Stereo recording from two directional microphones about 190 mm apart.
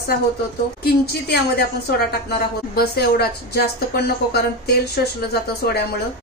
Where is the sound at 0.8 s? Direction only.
55° left (ahead or behind).